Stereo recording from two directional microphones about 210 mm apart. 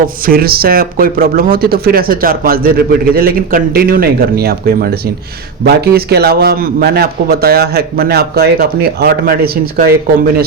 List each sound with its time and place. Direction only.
0.0 s speech: 45° right (ahead or behind)